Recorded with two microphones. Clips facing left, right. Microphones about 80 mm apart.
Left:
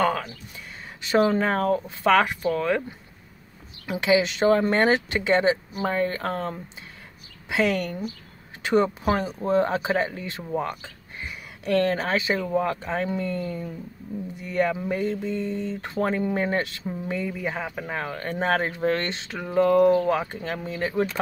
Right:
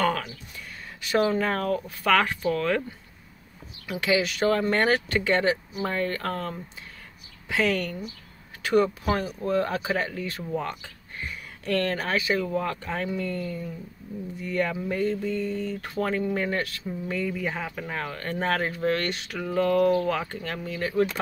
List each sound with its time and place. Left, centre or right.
1.0 s speech: left; by 2.8 s centre
3.8 s speech: left